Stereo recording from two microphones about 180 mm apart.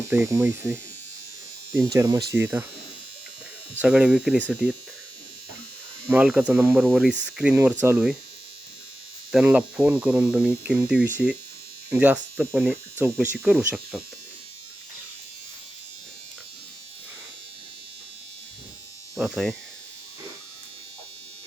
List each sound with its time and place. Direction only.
0.1 s hum: 15° right (ahead or behind)
3.8 s hum: 5° right (ahead or behind)
6.1 s hum: 5° right (ahead or behind)
9.3 s hum: 5° right (ahead or behind)
13.3 s speech: 5° right (ahead or behind)
19.1 s speech: 5° right (ahead or behind)